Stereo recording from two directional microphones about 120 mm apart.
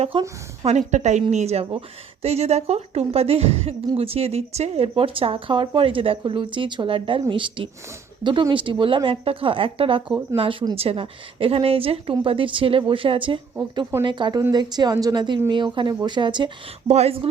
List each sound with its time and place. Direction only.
0.6 s a woman's voice: 70° right (ahead or behind)
1.3 s a woman's voice: 65° right (ahead or behind); by 10.8 s 40° right (ahead or behind)
10.8 s a woman's voice: 50° right (ahead or behind)
16.9 s speech: 60° right (ahead or behind)